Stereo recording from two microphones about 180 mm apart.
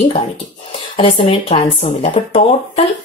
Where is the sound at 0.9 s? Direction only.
30° left (ahead or behind).